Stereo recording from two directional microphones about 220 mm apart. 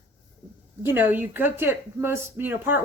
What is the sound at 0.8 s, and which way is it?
A woman's voice, 10° right (ahead or behind).